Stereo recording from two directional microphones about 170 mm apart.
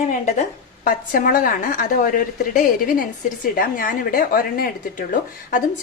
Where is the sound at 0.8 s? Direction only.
55° left (ahead or behind).